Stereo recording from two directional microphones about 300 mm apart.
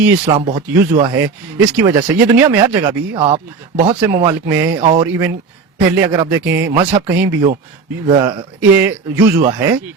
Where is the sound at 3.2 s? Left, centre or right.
Centre.